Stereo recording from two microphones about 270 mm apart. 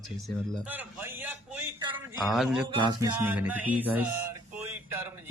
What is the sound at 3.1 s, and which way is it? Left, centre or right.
Speech, centre.